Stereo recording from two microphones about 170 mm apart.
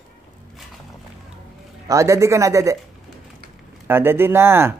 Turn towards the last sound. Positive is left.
turn(degrees=-15)  # may be behind; listen again after turning